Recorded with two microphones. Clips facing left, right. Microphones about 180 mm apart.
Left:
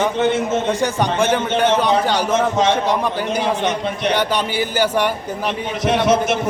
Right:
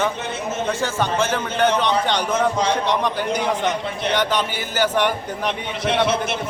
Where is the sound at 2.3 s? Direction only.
20° left (ahead or behind).